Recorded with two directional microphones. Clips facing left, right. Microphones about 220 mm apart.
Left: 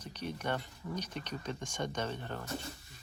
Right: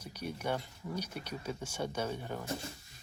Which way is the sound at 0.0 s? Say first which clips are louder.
Even; 10° right (ahead or behind).